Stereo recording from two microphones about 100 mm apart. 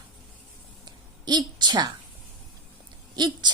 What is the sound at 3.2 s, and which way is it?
Speech, 45° right (ahead or behind).